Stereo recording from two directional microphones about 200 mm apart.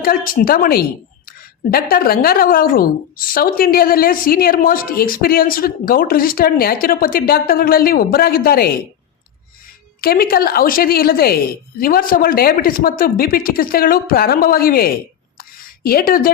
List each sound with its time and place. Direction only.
0.0 s a woman's voice: 45° left (ahead or behind)
10.0 s a woman's voice: 50° left (ahead or behind)
15.4 s a sound: 50° left (ahead or behind)